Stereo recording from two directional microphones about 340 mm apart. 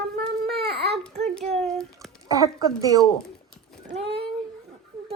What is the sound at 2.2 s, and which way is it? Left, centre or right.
Speech, centre.